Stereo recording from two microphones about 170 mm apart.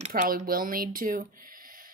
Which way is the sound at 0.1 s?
60° right (ahead or behind).